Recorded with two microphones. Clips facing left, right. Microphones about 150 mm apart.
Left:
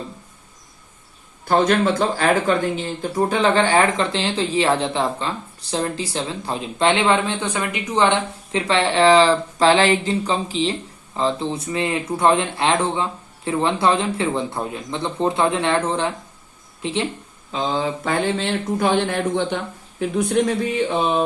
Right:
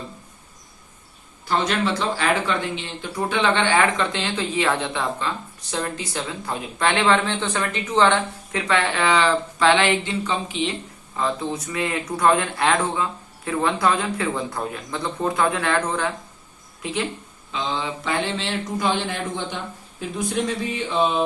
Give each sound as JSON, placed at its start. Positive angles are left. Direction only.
{"t": 1.5, "sound": "speech", "side_deg": 50}
{"t": 17.5, "sound": "speech", "side_deg": 40}